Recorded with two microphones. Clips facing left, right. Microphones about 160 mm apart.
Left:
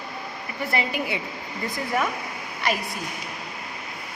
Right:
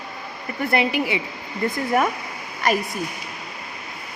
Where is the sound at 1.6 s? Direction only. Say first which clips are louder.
Right 5 dB; 55° right (ahead or behind).